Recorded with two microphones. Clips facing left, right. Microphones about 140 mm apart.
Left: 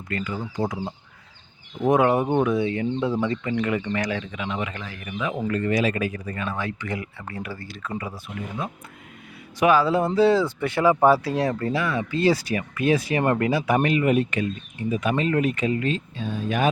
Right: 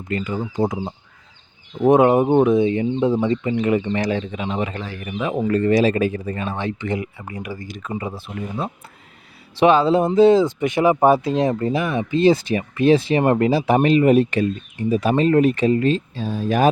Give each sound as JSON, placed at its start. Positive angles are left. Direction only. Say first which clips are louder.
{"t": 0.1, "sound": "speech", "louder": "right 5 dB", "side_deg": -20}